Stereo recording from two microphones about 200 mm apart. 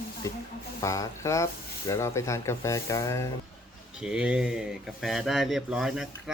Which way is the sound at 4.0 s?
5° right (ahead or behind).